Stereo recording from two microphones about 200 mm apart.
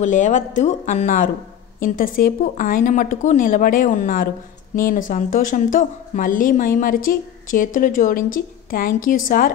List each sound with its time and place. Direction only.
0.0 s a woman's voice: 40° left (ahead or behind)